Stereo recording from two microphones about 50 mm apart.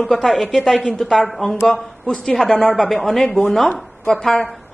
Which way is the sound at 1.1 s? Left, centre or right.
Centre.